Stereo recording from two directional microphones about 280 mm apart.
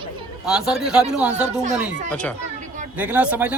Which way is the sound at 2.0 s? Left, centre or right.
Centre.